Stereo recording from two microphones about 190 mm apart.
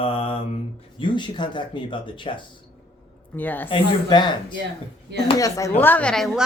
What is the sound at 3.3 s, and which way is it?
Speech, 10° left (ahead or behind).